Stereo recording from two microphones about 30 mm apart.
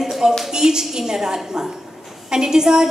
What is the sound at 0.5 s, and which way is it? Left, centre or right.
A woman's voice, right.